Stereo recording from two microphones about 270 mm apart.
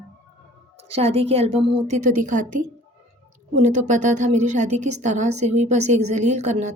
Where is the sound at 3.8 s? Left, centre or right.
Right.